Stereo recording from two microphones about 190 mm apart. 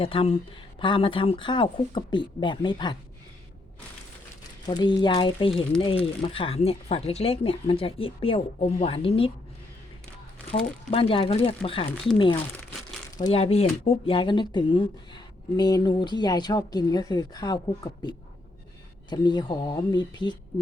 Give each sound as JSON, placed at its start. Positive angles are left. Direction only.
{"t": 0.0, "sound": "speech", "side_deg": 30}
{"t": 4.6, "sound": "speech", "side_deg": 25}
{"t": 10.5, "sound": "speech", "side_deg": 30}
{"t": 19.1, "sound": "speech", "side_deg": 20}